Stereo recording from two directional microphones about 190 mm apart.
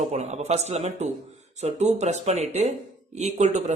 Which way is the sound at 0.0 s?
35° right (ahead or behind).